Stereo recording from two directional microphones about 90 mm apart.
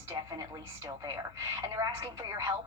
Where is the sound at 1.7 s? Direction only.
35° right (ahead or behind).